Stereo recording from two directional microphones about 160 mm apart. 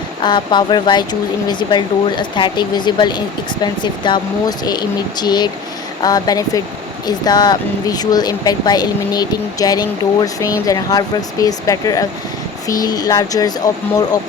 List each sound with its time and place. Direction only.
0.2 s speech: 30° left (ahead or behind)